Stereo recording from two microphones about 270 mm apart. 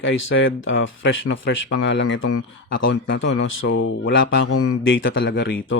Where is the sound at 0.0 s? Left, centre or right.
Left.